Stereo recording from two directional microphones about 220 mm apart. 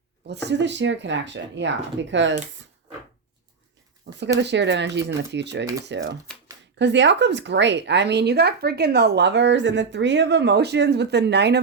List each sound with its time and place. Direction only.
0.3 s speech: 50° right (ahead or behind)
4.4 s speech: 50° right (ahead or behind)